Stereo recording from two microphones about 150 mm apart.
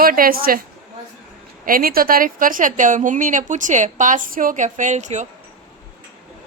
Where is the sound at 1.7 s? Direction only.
75° right (ahead or behind); by 5.2 s 50° right (ahead or behind).